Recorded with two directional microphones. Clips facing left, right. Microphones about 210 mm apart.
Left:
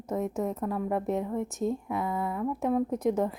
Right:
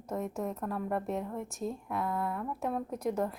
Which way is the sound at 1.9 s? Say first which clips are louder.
Left 3 dB; 5° left (ahead or behind).